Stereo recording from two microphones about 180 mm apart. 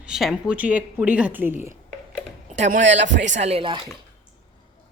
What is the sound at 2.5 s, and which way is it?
Speech, 45° right (ahead or behind).